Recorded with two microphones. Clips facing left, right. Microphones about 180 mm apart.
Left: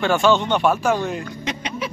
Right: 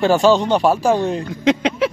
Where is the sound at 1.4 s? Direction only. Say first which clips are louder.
Right 15 dB; 90° right.